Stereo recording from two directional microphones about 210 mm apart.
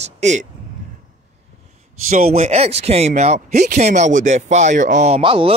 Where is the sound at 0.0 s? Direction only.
35° right (ahead or behind).